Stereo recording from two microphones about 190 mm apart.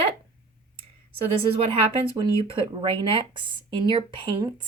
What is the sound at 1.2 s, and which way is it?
Speech, 30° right (ahead or behind).